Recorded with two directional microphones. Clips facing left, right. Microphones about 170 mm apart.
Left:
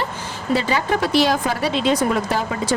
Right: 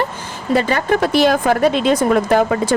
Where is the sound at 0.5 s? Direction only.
50° right (ahead or behind).